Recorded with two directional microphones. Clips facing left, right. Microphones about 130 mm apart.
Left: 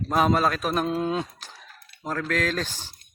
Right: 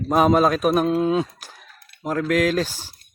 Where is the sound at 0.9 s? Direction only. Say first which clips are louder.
Right 6 dB; 5° right (ahead or behind).